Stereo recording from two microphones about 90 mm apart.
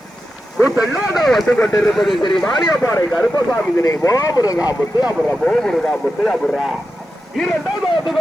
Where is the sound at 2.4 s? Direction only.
50° left (ahead or behind).